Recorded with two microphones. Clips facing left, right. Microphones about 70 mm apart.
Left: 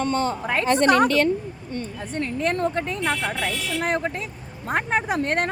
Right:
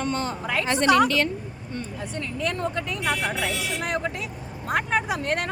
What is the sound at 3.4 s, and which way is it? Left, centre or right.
Speech, centre.